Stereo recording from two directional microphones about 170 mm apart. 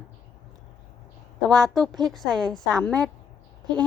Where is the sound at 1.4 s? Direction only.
5° left (ahead or behind).